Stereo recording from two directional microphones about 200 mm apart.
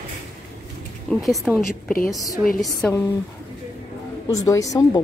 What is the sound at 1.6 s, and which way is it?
Speech, 45° left (ahead or behind).